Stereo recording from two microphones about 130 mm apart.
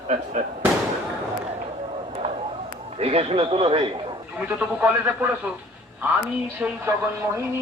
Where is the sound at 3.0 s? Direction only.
50° right (ahead or behind).